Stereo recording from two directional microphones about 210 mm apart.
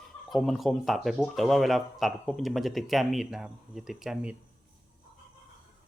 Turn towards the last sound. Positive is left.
turn(degrees=-5)  # may be behind; listen again after turning